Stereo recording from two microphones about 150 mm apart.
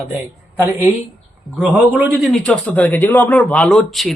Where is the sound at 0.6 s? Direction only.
15° right (ahead or behind).